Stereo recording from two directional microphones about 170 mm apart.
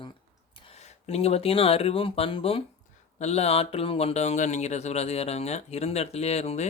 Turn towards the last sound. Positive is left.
turn(degrees=40)  # may be behind; listen again after turning